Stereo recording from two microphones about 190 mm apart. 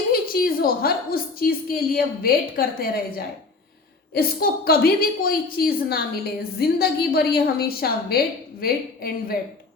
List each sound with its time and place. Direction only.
0.1 s a woman's voice: 50° left (ahead or behind)